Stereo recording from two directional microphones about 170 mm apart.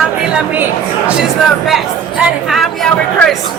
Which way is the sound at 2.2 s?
Centre (ahead or behind).